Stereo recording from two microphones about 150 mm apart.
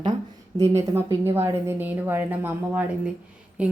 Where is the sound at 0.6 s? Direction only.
20° right (ahead or behind).